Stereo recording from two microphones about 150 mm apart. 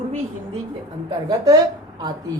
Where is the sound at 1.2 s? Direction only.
25° right (ahead or behind).